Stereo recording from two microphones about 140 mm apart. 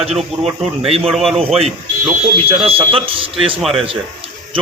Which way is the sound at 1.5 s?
45° right (ahead or behind).